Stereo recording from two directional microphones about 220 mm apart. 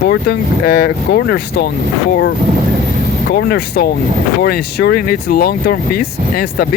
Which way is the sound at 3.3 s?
45° left (ahead or behind).